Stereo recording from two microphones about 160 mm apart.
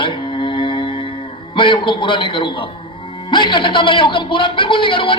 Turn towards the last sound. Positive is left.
turn(degrees=30)  # may be behind; listen again after turning